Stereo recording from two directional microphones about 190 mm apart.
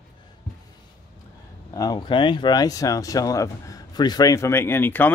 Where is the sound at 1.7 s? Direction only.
20° left (ahead or behind).